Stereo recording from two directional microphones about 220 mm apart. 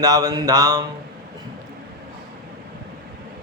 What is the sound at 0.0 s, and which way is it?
Speech, 15° right (ahead or behind).